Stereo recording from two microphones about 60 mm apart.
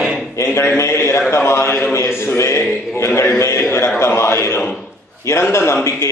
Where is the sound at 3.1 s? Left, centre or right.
Left.